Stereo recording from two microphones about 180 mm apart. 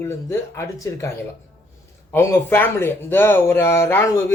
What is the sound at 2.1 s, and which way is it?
Speech, 15° left (ahead or behind).